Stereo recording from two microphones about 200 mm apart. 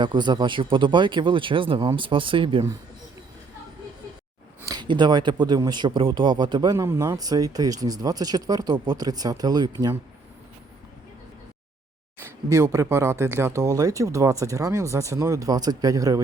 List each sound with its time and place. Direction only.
0.0 s speech: 20° right (ahead or behind)
4.6 s speech: 20° right (ahead or behind)
12.5 s speech: 15° right (ahead or behind)